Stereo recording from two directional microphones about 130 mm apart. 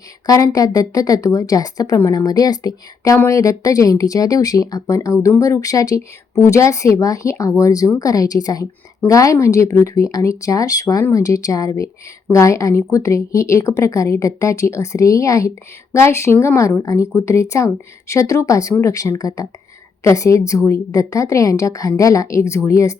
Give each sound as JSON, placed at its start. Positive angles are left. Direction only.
{"t": 0.3, "sound": "a woman's voice", "side_deg": 25}